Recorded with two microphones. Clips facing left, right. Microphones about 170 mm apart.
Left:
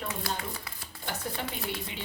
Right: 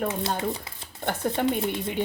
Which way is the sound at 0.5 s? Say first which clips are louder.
Right 2 dB; 25° right (ahead or behind).